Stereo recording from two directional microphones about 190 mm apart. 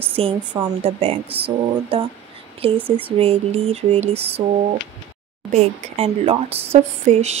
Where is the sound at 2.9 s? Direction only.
30° right (ahead or behind).